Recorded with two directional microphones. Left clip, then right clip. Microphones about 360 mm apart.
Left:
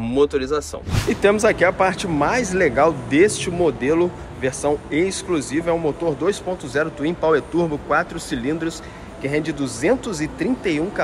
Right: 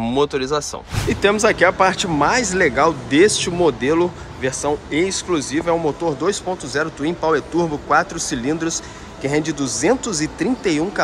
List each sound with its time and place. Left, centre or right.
0.0 s speech: centre